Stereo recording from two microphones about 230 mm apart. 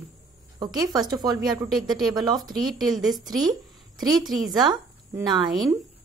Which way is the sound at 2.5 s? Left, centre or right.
Centre.